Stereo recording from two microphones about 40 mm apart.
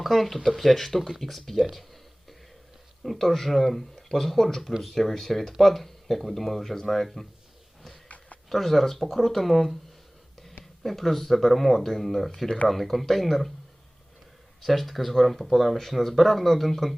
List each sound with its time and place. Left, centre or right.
0.0 s speech: centre
3.0 s speech: centre
8.0 s a sound: left
8.4 s speech: centre
10.8 s speech: centre
14.6 s speech: centre